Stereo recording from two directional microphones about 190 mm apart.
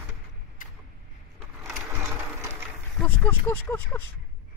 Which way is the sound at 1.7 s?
15° right (ahead or behind).